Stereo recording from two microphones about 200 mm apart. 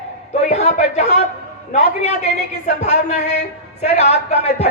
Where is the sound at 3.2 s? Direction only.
35° left (ahead or behind).